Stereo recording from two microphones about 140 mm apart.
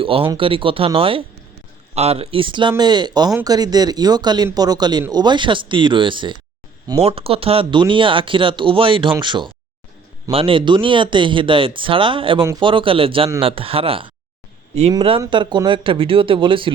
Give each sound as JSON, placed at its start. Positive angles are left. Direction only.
{"t": 0.0, "sound": "speech", "side_deg": -40}